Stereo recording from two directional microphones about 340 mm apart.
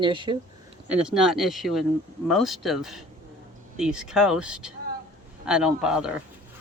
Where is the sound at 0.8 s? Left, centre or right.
Centre.